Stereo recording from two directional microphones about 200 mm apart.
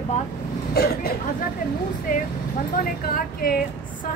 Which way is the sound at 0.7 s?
50° left (ahead or behind).